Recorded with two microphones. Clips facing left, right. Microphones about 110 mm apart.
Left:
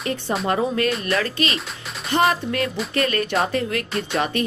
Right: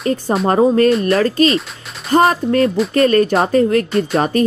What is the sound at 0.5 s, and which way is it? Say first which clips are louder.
A woman's voice: right 10 dB; 35° right (ahead or behind).